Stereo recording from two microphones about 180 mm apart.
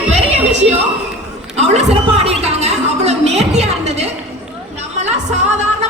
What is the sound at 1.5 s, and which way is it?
A woman's voice, 35° right (ahead or behind).